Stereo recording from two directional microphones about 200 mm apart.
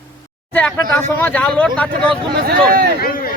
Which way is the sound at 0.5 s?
10° left (ahead or behind).